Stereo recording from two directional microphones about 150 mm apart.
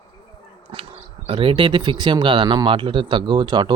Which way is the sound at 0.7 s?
35° right (ahead or behind).